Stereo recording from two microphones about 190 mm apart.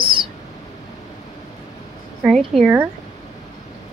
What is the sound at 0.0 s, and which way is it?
Bird, 25° right (ahead or behind).